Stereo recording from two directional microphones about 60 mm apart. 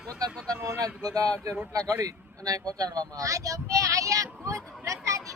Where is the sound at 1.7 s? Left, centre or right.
Right.